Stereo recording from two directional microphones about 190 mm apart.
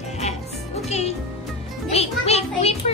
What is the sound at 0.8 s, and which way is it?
Music, 35° left (ahead or behind).